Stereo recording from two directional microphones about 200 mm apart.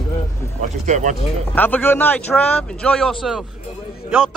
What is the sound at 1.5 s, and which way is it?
A man's voice, 10° left (ahead or behind).